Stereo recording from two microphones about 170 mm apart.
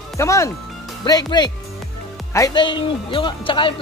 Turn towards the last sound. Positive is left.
turn(degrees=30)  # may be behind; listen again after turning